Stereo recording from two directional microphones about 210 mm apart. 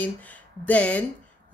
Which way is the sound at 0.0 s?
5° left (ahead or behind).